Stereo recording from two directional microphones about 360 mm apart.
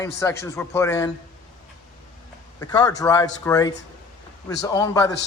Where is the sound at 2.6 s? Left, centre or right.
Centre.